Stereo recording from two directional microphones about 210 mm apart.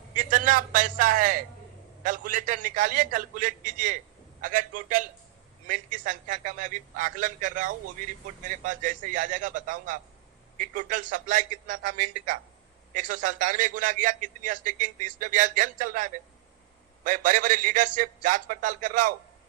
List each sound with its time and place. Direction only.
0.2 s a man's voice: 40° right (ahead or behind)